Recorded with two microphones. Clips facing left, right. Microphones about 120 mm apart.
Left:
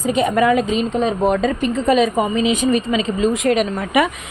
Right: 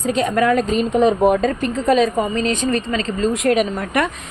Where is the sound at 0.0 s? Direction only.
5° left (ahead or behind).